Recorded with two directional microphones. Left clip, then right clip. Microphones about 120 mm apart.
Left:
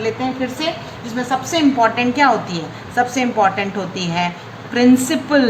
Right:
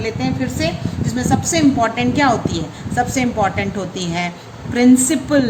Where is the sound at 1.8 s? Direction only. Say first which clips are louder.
Left 2 dB; 90° right.